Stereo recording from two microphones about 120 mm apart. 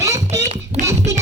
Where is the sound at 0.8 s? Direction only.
25° right (ahead or behind).